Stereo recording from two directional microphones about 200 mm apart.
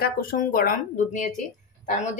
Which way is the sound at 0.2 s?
45° left (ahead or behind).